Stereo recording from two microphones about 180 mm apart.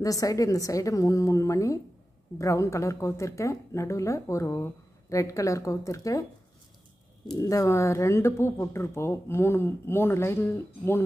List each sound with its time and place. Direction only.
0.0 s speech: 20° left (ahead or behind)
7.3 s speech: 20° left (ahead or behind)